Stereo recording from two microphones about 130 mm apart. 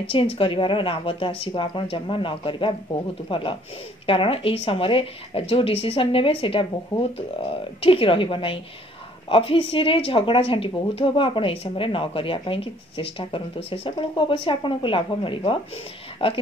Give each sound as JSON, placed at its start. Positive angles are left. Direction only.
{"t": 0.1, "sound": "a woman's voice", "side_deg": 45}